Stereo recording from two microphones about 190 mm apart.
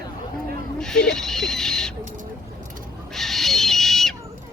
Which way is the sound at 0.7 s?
5° left (ahead or behind).